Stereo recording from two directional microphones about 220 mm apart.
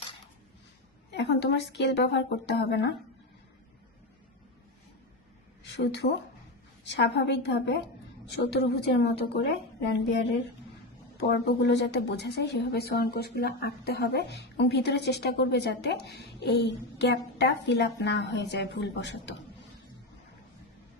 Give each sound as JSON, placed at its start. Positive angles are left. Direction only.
{"t": 1.1, "sound": "speech", "side_deg": 50}
{"t": 5.7, "sound": "speech", "side_deg": 50}
{"t": 11.2, "sound": "speech", "side_deg": 50}